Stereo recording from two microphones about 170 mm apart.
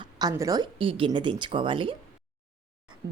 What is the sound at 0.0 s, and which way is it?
Speech, 20° right (ahead or behind).